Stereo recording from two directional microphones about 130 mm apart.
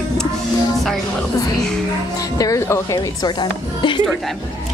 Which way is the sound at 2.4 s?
25° left (ahead or behind).